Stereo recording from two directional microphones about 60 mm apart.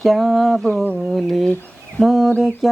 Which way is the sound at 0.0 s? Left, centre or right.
Centre.